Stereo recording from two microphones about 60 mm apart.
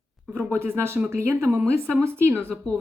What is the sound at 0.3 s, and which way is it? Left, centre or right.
Speech, right.